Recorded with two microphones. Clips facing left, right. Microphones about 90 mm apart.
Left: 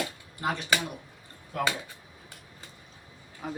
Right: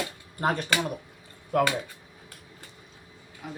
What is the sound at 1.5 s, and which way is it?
Speech, 65° right (ahead or behind).